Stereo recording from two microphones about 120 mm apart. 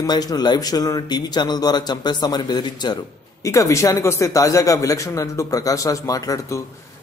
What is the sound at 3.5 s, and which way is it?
Speech, 25° left (ahead or behind).